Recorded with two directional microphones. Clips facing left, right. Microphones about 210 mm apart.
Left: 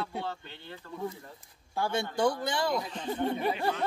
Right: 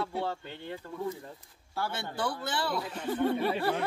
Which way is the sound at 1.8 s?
15° left (ahead or behind).